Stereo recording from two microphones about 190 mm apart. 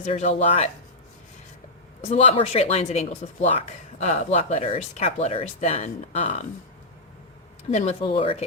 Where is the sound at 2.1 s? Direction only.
30° left (ahead or behind).